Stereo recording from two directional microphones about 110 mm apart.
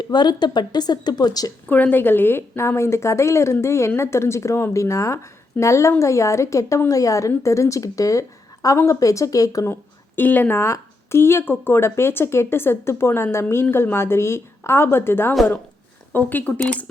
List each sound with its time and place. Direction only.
0.0 s speech: 40° left (ahead or behind)
1.6 s speech: 15° left (ahead or behind); by 9.7 s 35° left (ahead or behind)
10.2 s speech: 15° left (ahead or behind)